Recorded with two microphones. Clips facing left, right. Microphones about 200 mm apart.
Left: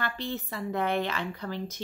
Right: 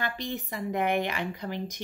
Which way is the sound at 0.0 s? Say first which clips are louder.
Even; 15° right (ahead or behind).